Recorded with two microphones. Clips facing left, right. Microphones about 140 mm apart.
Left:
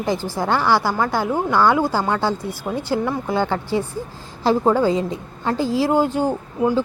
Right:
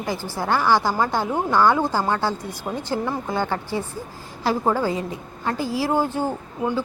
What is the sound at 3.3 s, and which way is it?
Speech, 15° left (ahead or behind).